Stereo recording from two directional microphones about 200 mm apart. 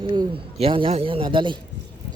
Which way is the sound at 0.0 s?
25° right (ahead or behind).